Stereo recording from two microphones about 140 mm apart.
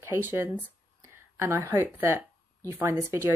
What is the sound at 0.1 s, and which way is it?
A woman's voice, 15° right (ahead or behind).